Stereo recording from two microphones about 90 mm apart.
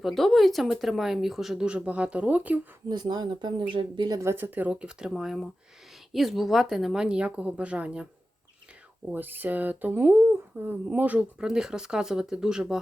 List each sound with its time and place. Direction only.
0.0 s speech: centre (ahead or behind); by 2.6 s 15° right (ahead or behind)
2.9 s speech: 50° right (ahead or behind)
4.2 s speech: 25° right (ahead or behind)
9.0 s speech: 20° right (ahead or behind)
11.3 s speech: 5° right (ahead or behind)